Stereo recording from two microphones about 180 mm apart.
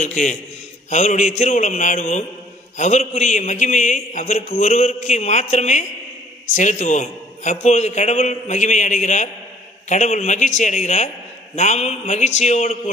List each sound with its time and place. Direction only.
0.0 s a man's voice: 40° left (ahead or behind)